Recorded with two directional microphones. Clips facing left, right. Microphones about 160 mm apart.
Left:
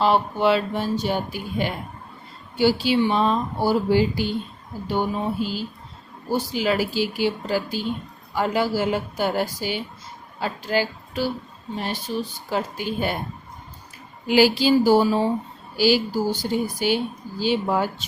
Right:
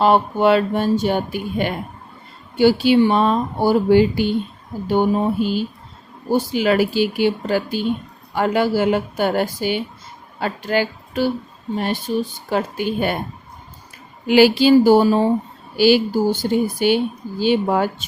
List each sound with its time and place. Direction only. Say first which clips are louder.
0.0 s speech: right 4 dB; 55° right (ahead or behind)
12.5 s speech: right 4 dB; 60° right (ahead or behind)
14.3 s speech: right 5 dB; 65° right (ahead or behind)